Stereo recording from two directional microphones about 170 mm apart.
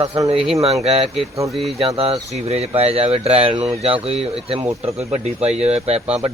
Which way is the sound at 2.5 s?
40° right (ahead or behind).